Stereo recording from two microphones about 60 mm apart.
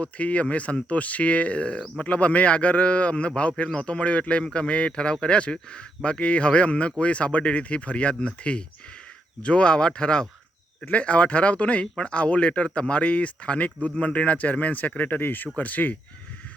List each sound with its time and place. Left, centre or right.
0.0 s speech: left